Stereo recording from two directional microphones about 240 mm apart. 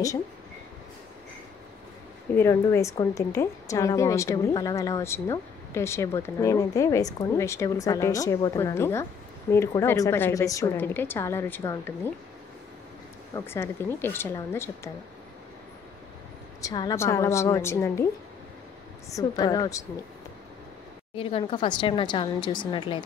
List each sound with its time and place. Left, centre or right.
2.3 s a woman's voice: centre
13.3 s a woman's voice: centre
16.6 s a woman's voice: centre
19.0 s a woman's voice: centre
21.1 s a woman's voice: left